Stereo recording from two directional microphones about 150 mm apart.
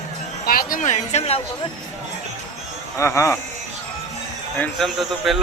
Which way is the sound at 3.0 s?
20° left (ahead or behind).